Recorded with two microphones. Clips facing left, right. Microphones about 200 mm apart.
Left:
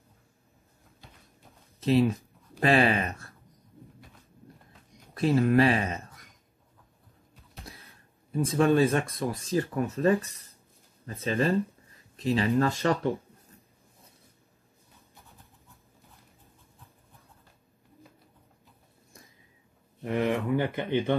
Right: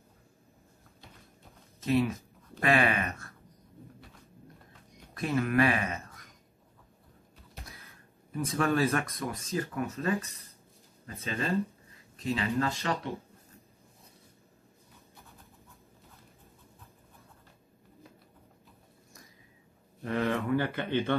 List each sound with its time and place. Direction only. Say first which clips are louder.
1.8 s speech: left 4 dB; 30° left (ahead or behind)
5.1 s speech: left 5 dB; 30° left (ahead or behind)
7.8 s a sound: right 1 dB; 30° left (ahead or behind)
8.7 s speech: left 4 dB; 30° left (ahead or behind); by 13.0 s 45° left (ahead or behind)
20.0 s speech: left 3 dB; 15° left (ahead or behind)